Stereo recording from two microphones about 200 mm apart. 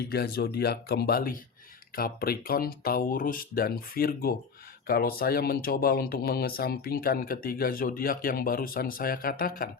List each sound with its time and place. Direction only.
0.1 s speech: 50° left (ahead or behind)